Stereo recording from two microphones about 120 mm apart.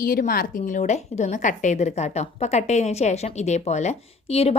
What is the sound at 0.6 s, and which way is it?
A woman's voice, 90° left.